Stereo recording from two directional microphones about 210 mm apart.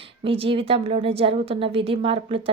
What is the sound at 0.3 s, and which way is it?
A woman's voice, 25° right (ahead or behind).